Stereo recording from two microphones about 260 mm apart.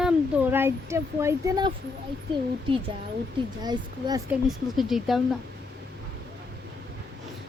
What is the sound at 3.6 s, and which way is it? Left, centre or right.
Speech, centre.